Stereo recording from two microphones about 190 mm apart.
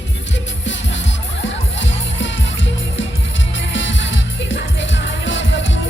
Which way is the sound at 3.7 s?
80° left.